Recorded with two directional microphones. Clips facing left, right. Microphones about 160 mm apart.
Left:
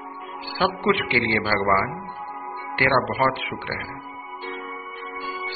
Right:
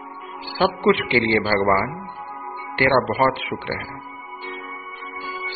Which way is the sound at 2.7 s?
25° right (ahead or behind).